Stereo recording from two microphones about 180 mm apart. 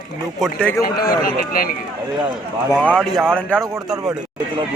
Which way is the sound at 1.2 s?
55° left (ahead or behind).